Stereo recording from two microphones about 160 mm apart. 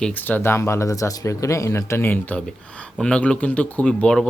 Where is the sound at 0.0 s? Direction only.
10° left (ahead or behind).